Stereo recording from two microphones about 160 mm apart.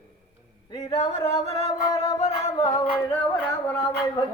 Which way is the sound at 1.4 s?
40° right (ahead or behind).